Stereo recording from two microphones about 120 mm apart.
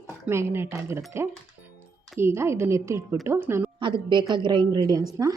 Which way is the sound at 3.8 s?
40° right (ahead or behind).